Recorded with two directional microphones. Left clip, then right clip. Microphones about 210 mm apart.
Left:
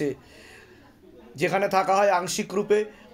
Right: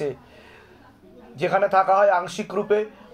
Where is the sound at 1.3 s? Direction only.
40° left (ahead or behind).